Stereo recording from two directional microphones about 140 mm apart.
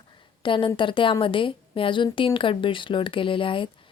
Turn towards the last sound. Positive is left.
turn(degrees=40)  # may be behind; listen again after turning